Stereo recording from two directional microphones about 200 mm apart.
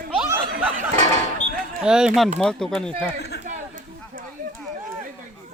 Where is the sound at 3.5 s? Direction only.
40° right (ahead or behind).